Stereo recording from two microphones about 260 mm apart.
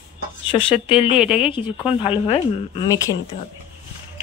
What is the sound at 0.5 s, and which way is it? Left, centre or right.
Speech, centre.